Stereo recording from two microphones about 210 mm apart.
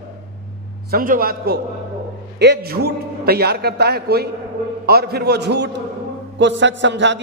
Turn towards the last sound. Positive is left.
turn(degrees=-55)  # may be behind; listen again after turning